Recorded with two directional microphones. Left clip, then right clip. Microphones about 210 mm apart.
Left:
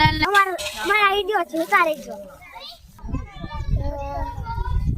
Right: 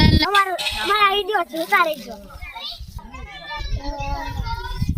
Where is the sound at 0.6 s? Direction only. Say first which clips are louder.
Right 5 dB; 60° left (ahead or behind).